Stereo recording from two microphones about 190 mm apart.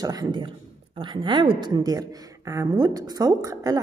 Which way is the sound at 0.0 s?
20° right (ahead or behind).